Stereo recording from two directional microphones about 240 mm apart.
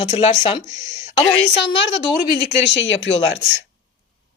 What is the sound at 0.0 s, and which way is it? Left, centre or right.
Speech, left.